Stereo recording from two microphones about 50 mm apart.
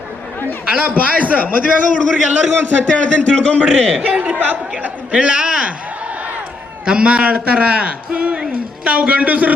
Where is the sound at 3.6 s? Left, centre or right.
Centre.